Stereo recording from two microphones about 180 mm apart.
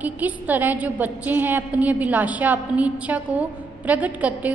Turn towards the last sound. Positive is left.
turn(degrees=-10)  # may be behind; listen again after turning